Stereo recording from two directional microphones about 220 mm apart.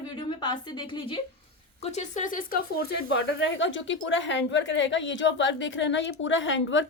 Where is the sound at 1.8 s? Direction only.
30° left (ahead or behind).